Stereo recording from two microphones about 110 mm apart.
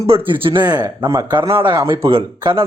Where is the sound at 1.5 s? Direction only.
55° right (ahead or behind).